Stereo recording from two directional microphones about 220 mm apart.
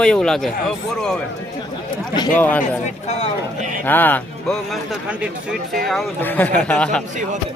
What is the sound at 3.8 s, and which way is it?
Speech, 10° left (ahead or behind).